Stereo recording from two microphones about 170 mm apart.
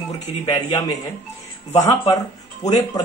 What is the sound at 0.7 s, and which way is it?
Speech, 20° left (ahead or behind).